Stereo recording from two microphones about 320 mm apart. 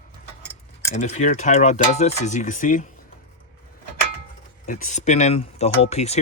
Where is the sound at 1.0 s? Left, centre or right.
Left.